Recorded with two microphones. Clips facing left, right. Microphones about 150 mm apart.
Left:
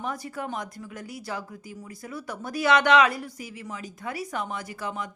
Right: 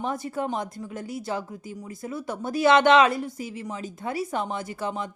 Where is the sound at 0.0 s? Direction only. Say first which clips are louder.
Right 4 dB; 25° right (ahead or behind).